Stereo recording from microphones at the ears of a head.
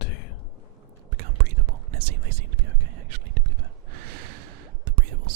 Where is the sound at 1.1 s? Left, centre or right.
Right.